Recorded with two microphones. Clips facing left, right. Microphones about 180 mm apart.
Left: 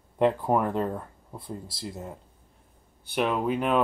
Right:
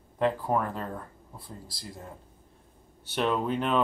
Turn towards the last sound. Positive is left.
turn(degrees=10)  # may be behind; listen again after turning